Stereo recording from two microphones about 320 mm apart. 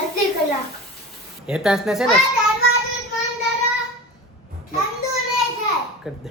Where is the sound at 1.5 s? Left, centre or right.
Centre.